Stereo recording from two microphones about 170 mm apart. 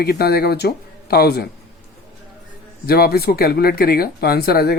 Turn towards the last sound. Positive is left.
turn(degrees=65)  # may be behind; listen again after turning